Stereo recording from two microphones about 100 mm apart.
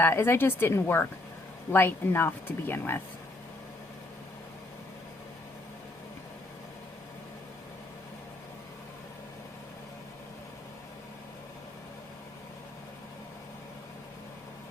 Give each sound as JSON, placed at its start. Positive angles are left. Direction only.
{"t": 0.0, "sound": "speech", "side_deg": 25}